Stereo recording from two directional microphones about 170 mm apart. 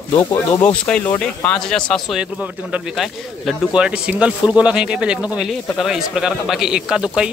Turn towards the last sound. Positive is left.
turn(degrees=-5)  # may be behind; listen again after turning